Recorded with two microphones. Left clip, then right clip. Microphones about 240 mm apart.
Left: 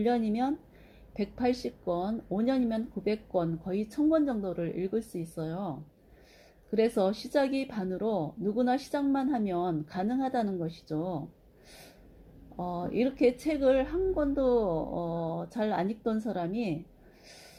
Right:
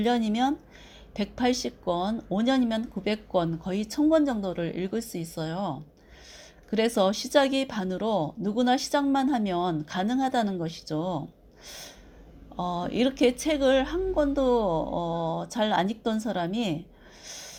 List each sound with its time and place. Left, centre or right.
0.0 s speech: right
13.0 s speech: right